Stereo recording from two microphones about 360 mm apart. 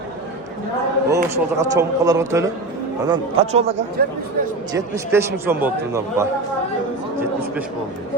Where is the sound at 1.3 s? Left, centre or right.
Centre.